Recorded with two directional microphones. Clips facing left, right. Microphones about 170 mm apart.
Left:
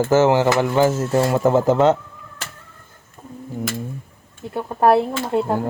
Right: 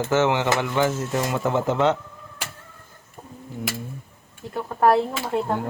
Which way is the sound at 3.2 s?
15° right (ahead or behind).